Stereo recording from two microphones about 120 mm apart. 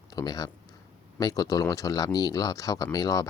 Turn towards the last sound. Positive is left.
turn(degrees=30)  # may be behind; listen again after turning